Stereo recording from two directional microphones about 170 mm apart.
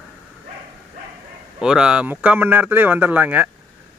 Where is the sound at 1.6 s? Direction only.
5° right (ahead or behind).